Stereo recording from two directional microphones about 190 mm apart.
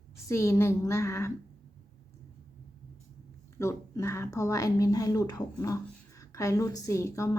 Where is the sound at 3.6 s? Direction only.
15° left (ahead or behind).